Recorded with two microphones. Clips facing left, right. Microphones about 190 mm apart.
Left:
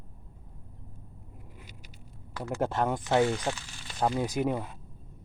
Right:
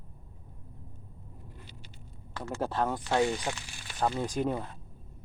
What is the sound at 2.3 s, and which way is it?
Speech, 15° left (ahead or behind).